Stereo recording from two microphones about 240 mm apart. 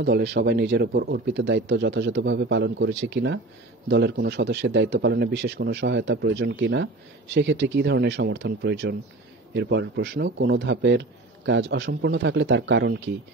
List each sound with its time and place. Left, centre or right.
0.0 s a man's voice: right